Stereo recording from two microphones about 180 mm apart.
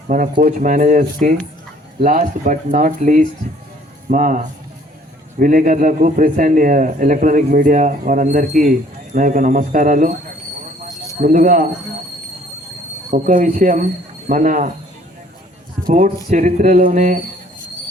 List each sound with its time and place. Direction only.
0.1 s speech: 45° right (ahead or behind)
11.2 s speech: 50° right (ahead or behind)
13.1 s speech: 45° right (ahead or behind)
15.8 s speech: 45° right (ahead or behind)